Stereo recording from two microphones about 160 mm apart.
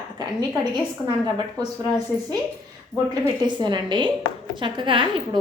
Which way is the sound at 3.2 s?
30° right (ahead or behind).